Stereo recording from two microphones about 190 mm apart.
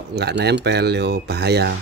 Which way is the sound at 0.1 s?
60° right (ahead or behind).